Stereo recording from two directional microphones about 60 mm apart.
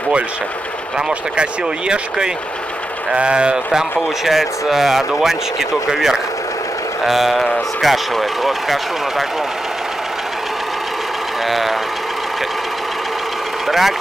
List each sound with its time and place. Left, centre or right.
0.9 s speech: centre
4.2 s speech: centre
11.4 s speech: centre
13.7 s speech: centre